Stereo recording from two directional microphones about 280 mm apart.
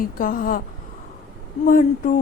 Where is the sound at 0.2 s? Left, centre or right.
Left.